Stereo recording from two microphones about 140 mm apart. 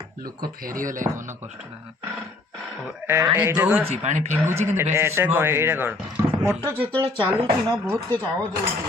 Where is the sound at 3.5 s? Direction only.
10° right (ahead or behind).